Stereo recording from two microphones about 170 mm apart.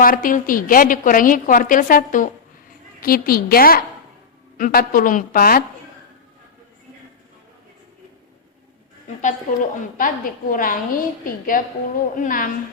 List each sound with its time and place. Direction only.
0.0 s a woman's voice: 55° left (ahead or behind)
9.5 s a woman's voice: 50° left (ahead or behind)